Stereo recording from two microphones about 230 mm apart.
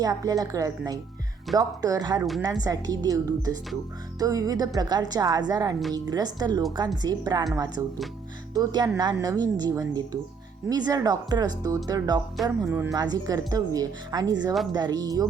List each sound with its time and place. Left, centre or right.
0.0 s a woman's voice: centre
12.4 s a woman's voice: centre